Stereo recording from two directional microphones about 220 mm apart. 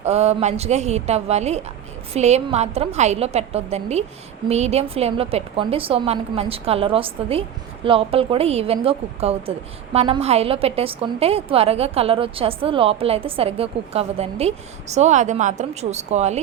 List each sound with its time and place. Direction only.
0.0 s a woman's voice: 30° right (ahead or behind)